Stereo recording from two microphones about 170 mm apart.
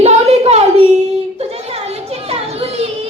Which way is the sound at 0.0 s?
40° right (ahead or behind).